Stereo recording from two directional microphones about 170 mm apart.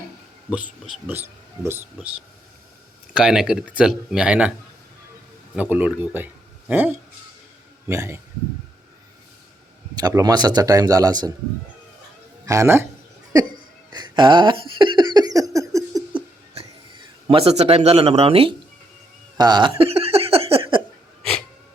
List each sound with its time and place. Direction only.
0.5 s speech: 10° right (ahead or behind)
3.1 s speech: 5° right (ahead or behind)
5.5 s speech: 10° right (ahead or behind)
9.9 s a man's voice: 20° right (ahead or behind)
12.5 s speech: 15° right (ahead or behind)
13.3 s laughter: 25° right (ahead or behind)
17.2 s speech: 35° right (ahead or behind)
19.4 s a sound: 25° right (ahead or behind)